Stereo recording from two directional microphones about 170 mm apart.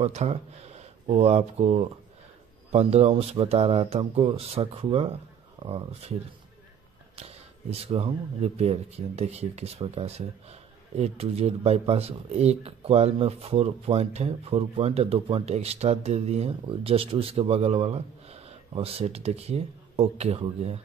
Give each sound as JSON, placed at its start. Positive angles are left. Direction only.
{"t": 0.0, "sound": "speech", "side_deg": -40}
{"t": 7.2, "sound": "speech", "side_deg": -35}